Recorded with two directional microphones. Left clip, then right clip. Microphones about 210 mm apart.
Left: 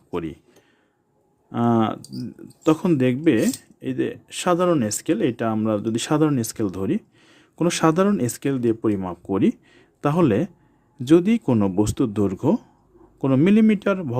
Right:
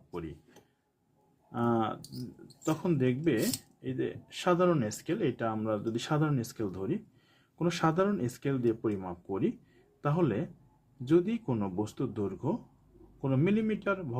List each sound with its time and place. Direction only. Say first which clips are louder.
0.1 s speech: left 12 dB; 55° left (ahead or behind)
1.5 s speech: left 9 dB; 50° left (ahead or behind)